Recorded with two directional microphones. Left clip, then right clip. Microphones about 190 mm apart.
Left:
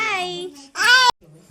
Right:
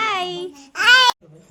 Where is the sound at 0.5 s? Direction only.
5° right (ahead or behind).